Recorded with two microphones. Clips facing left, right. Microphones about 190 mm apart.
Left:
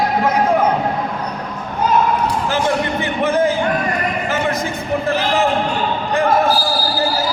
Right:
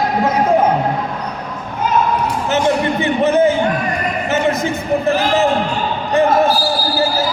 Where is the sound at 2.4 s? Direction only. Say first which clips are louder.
Right 6 dB; 25° right (ahead or behind).